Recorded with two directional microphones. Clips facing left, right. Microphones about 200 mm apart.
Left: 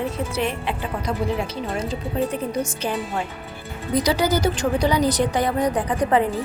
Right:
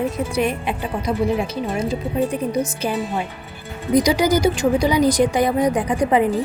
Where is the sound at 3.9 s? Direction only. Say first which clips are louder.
Right 4 dB; 15° right (ahead or behind).